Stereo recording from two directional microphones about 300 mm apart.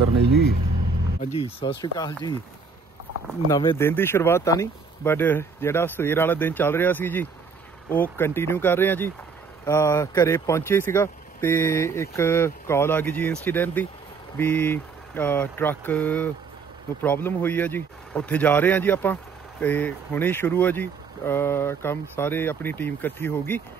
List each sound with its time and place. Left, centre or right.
0.2 s speech: right
1.2 s speech: centre
3.4 s speech: centre